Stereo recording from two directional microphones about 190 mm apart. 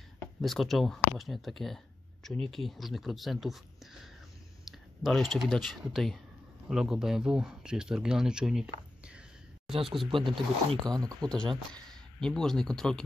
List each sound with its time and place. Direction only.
0.4 s speech: centre (ahead or behind)
10.0 s speech: 25° right (ahead or behind)
11.2 s speech: 5° left (ahead or behind)